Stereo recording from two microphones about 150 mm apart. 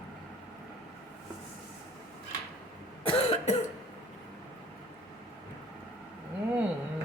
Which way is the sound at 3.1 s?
45° left (ahead or behind).